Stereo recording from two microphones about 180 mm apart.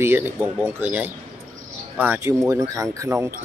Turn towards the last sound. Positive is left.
turn(degrees=-15)  # may be behind; listen again after turning